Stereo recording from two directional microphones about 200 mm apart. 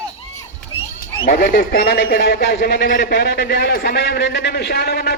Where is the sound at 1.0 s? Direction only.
50° left (ahead or behind).